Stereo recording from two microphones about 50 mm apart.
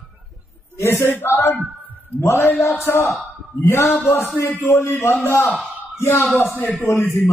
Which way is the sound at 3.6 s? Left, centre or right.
Left.